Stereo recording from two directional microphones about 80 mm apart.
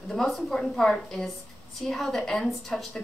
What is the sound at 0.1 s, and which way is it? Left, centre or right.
Speech, centre.